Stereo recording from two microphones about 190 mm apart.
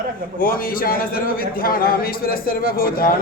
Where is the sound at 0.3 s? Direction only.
50° left (ahead or behind).